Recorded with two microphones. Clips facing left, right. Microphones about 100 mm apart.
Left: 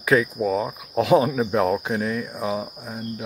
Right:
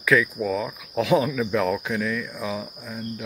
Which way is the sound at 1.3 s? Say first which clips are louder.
Left 2 dB; 40° left (ahead or behind).